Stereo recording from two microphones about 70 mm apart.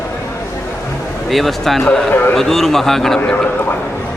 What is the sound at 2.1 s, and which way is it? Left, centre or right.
Speech, left.